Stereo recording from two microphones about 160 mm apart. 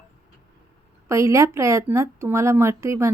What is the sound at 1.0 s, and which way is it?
Speech, 20° right (ahead or behind).